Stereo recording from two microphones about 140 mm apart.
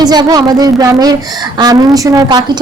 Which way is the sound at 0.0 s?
30° right (ahead or behind).